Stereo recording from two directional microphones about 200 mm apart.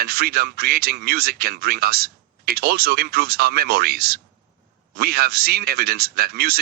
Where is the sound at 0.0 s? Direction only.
50° right (ahead or behind).